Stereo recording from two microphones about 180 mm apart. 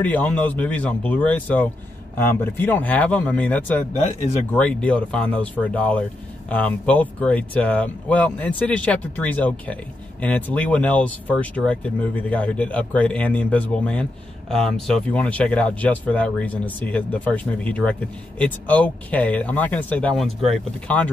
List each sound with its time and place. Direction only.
0.0 s speech: 10° left (ahead or behind)
4.0 s speech: 40° left (ahead or behind)
4.5 s speech: 5° left (ahead or behind)